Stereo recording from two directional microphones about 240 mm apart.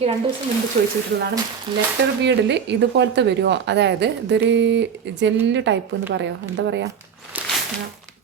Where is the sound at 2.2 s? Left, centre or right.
Right.